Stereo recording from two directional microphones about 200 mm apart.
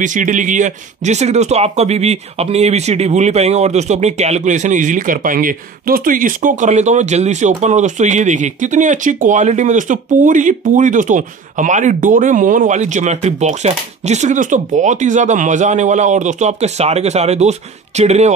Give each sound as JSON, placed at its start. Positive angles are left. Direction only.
{"t": 0.0, "sound": "speech", "side_deg": -40}